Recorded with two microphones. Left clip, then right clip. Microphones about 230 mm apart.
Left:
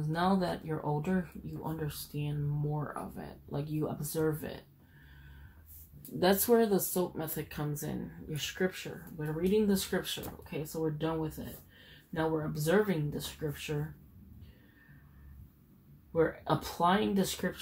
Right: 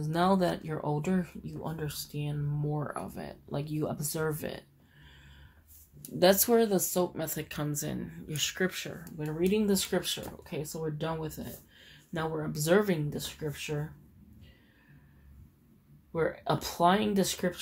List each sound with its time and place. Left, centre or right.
0.1 s speech: right
6.1 s speech: right
16.1 s speech: right